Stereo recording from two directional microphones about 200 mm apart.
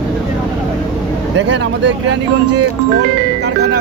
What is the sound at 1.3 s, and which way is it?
Vehicle, 65° right (ahead or behind).